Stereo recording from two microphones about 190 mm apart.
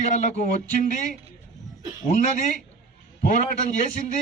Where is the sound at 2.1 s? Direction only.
40° left (ahead or behind).